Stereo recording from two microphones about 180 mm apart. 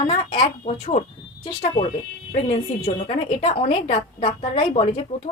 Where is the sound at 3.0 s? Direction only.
35° left (ahead or behind).